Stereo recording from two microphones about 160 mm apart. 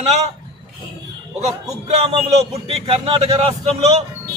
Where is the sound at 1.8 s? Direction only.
40° right (ahead or behind).